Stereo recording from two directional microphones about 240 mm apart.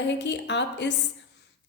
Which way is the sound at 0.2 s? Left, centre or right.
Left.